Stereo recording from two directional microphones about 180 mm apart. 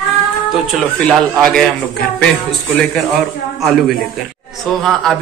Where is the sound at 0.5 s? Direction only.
5° left (ahead or behind).